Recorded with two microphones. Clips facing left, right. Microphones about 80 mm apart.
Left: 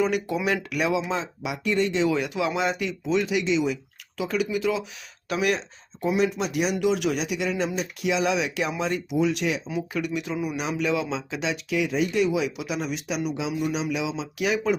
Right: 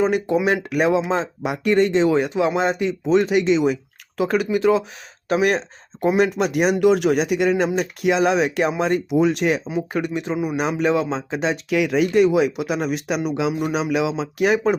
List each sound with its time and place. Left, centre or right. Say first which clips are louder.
0.0 s speech: right 6 dB; right
11.7 s speech: right 5 dB; right
12.1 s speech: right 7 dB; right